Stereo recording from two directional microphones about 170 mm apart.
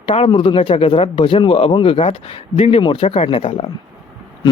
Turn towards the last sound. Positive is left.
turn(degrees=30)  # may be behind; listen again after turning